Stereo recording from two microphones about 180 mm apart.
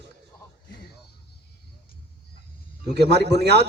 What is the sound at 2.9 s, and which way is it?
Speech, 65° right (ahead or behind).